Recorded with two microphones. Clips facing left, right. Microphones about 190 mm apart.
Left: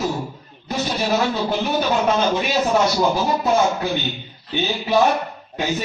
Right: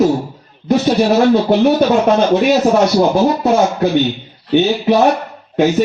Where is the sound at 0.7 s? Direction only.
55° right (ahead or behind).